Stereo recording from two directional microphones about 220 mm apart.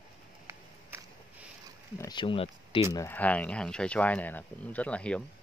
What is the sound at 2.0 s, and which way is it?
Speech, 20° left (ahead or behind).